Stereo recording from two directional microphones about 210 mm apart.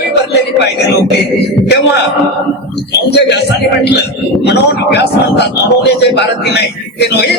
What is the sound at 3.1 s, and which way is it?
Speech, 55° left (ahead or behind).